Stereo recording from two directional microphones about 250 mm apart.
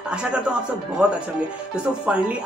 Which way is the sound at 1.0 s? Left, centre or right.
Centre.